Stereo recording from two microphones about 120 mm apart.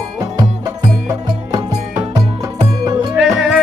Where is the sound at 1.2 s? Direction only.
30° right (ahead or behind).